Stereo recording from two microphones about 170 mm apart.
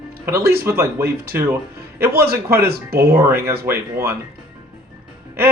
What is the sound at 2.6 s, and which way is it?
Speech, 65° right (ahead or behind).